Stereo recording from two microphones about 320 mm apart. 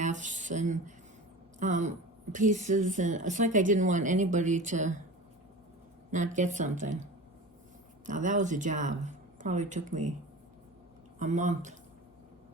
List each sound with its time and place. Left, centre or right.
0.0 s speech: right
6.1 s speech: right
8.0 s speech: right
11.2 s speech: right